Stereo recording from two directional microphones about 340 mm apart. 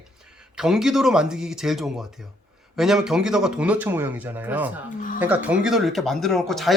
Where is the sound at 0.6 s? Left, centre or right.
Centre.